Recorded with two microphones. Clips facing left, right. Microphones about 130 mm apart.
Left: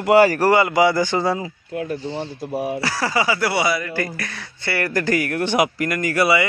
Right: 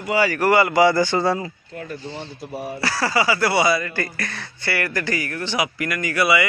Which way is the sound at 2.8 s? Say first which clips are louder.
Right 5 dB; 15° left (ahead or behind).